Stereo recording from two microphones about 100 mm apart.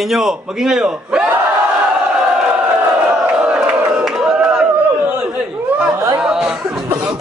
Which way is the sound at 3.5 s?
5° right (ahead or behind).